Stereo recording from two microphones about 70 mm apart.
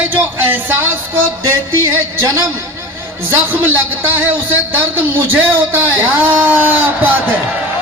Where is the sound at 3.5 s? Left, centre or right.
Right.